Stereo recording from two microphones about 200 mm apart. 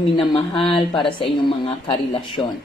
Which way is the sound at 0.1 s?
25° left (ahead or behind).